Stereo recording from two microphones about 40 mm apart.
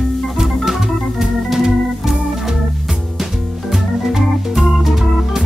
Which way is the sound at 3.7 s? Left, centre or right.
Centre.